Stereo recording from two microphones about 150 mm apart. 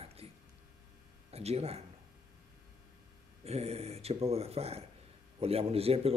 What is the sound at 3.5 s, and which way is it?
A man's voice, 45° right (ahead or behind).